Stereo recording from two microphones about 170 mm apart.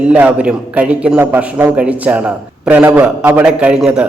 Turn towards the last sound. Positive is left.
turn(degrees=-5)  # may be behind; listen again after turning